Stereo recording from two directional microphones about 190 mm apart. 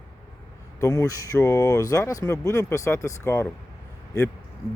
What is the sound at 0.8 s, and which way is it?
Speech, 15° left (ahead or behind).